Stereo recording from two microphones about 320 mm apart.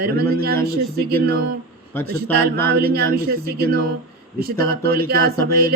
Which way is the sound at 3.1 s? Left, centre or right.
Right.